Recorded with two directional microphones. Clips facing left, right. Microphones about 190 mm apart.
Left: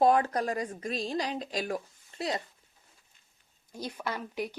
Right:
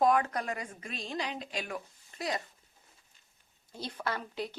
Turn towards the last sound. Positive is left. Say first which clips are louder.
# left 1 dB
turn(degrees=15)  # may be behind; listen again after turning